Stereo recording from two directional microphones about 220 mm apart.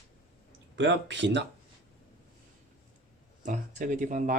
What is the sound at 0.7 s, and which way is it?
Speech, 55° right (ahead or behind).